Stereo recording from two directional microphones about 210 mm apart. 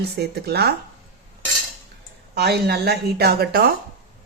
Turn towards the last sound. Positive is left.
turn(degrees=-45)  # may be behind; listen again after turning